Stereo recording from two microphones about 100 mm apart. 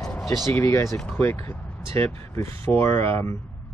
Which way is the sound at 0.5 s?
25° left (ahead or behind).